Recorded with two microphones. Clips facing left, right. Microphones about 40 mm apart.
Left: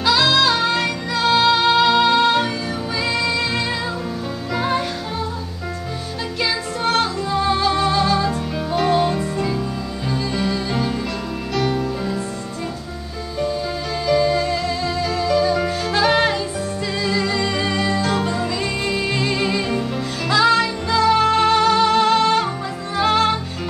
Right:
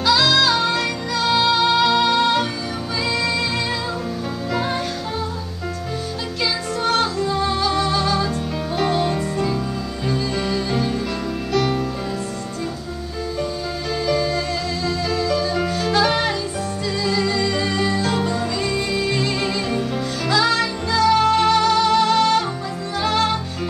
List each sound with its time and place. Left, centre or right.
0.0 s music: centre
4.6 s music: centre
7.0 s music: centre
14.0 s music: centre